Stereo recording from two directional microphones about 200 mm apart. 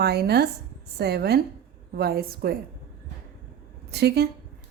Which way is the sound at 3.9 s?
55° right (ahead or behind).